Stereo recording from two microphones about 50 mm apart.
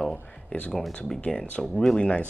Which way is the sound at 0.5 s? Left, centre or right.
Left.